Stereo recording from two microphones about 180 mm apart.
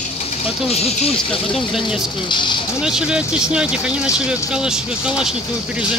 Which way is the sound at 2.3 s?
25° left (ahead or behind).